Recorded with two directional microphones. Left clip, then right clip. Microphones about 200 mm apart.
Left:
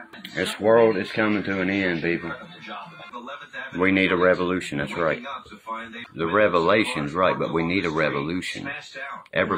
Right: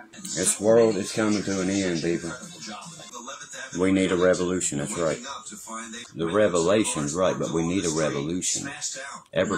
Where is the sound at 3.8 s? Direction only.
15° right (ahead or behind).